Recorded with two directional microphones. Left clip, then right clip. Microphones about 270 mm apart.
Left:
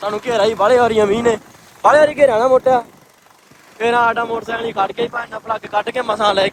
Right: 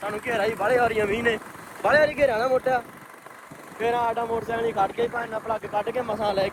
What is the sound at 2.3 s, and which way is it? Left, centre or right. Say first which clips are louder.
Speech: left 10 dB; left.